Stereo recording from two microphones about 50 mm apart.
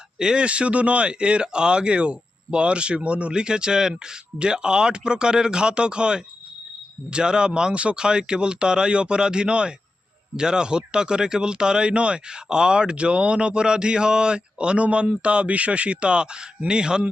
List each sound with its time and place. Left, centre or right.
0.2 s speech: centre